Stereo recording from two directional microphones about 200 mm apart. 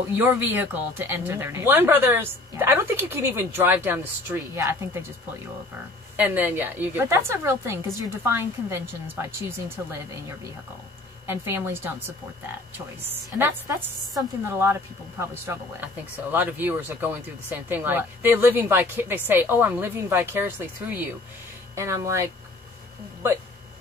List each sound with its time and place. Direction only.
0.1 s speech: 10° right (ahead or behind)
6.1 s speech: 10° right (ahead or behind)
11.2 s speech: 10° right (ahead or behind)
13.0 s speech: 10° right (ahead or behind)